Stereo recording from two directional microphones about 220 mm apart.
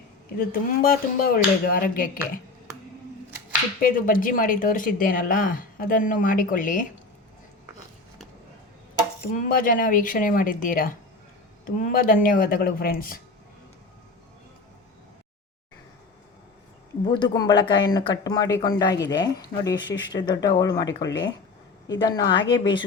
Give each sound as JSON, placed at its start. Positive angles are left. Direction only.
{"t": 0.3, "sound": "speech", "side_deg": 40}
{"t": 3.8, "sound": "speech", "side_deg": 40}
{"t": 9.3, "sound": "speech", "side_deg": 35}
{"t": 17.1, "sound": "speech", "side_deg": 20}